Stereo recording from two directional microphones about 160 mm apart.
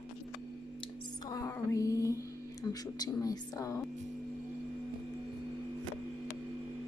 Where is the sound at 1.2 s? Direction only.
20° left (ahead or behind).